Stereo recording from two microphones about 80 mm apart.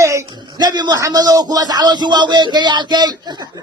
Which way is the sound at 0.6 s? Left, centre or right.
Right.